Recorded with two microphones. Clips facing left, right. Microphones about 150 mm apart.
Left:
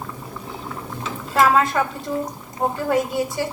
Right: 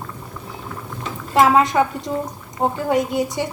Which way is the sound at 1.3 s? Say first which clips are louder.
Right 2 dB; 15° right (ahead or behind).